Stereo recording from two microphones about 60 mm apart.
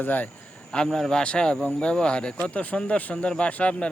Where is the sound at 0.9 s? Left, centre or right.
Centre.